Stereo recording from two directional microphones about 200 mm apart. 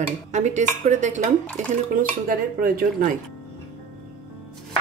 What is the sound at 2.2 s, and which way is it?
Speech, 45° right (ahead or behind).